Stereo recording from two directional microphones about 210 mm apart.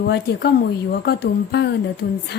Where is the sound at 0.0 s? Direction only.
50° left (ahead or behind).